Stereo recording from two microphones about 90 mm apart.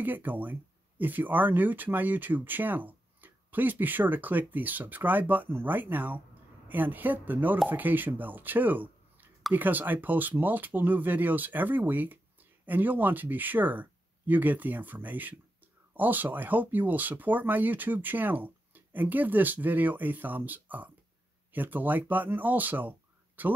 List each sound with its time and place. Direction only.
0.0 s speech: 20° right (ahead or behind)